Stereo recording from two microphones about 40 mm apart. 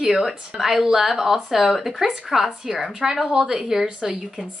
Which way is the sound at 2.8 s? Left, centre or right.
Centre.